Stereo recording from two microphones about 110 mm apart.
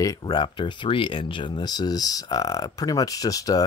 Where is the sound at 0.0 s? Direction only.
40° left (ahead or behind).